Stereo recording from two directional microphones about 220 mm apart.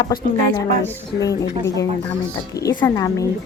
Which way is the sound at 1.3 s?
15° left (ahead or behind).